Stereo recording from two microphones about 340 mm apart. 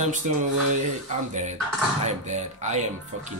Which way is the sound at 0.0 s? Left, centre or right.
Right.